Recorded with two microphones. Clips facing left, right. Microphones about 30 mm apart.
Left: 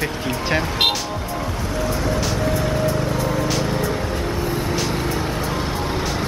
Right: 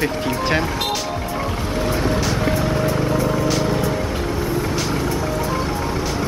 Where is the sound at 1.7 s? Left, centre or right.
Right.